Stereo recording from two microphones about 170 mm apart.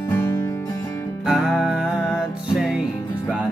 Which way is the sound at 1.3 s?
5° right (ahead or behind).